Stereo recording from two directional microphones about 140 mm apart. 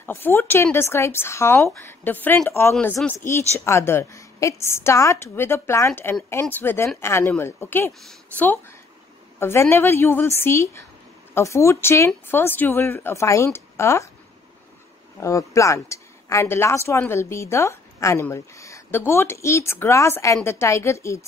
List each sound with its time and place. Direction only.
0.0 s speech: 15° left (ahead or behind)
15.1 s speech: 20° left (ahead or behind)